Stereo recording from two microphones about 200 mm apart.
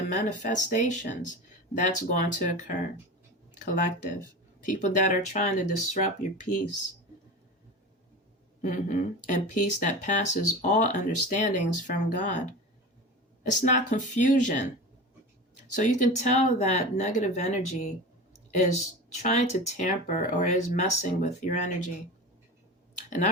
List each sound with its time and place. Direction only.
0.1 s speech: 40° left (ahead or behind)
8.6 s speech: 40° left (ahead or behind)
13.5 s speech: 35° left (ahead or behind)
15.7 s speech: 40° left (ahead or behind)
19.2 s speech: 35° left (ahead or behind)
23.0 s speech: 40° left (ahead or behind)